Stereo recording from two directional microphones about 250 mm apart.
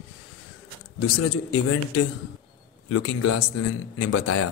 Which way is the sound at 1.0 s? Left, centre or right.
Left.